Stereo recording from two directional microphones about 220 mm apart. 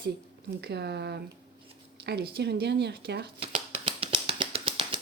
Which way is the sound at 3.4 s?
25° right (ahead or behind).